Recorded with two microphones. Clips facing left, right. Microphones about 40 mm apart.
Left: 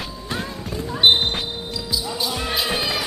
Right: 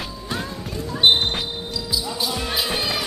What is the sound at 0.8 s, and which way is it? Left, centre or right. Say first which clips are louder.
Basketball bounce: left 1 dB; centre.